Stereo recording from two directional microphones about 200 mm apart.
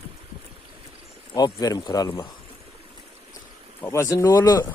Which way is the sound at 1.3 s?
20° left (ahead or behind).